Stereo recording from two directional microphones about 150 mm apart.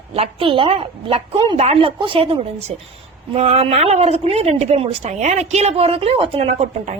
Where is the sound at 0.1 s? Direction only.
40° right (ahead or behind).